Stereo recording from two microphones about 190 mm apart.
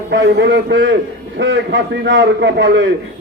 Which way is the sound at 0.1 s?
70° right (ahead or behind).